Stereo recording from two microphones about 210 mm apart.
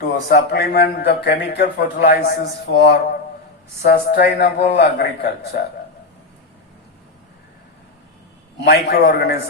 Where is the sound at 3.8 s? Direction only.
50° left (ahead or behind).